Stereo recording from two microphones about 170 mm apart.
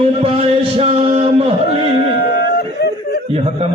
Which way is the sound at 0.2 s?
35° right (ahead or behind).